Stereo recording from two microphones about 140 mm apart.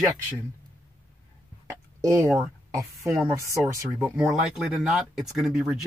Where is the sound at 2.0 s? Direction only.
20° right (ahead or behind).